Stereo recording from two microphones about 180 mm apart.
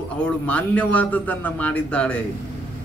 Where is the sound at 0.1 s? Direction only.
5° left (ahead or behind).